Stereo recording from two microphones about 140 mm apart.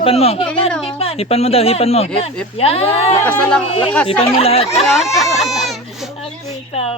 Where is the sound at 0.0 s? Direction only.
45° left (ahead or behind).